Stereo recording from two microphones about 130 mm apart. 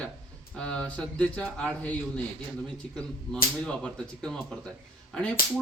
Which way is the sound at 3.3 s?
5° left (ahead or behind).